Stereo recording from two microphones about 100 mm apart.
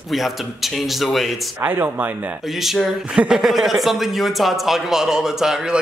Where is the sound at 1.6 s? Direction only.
20° right (ahead or behind).